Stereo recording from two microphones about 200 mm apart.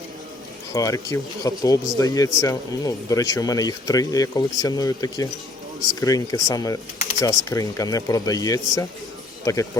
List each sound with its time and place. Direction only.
0.7 s speech: 15° left (ahead or behind)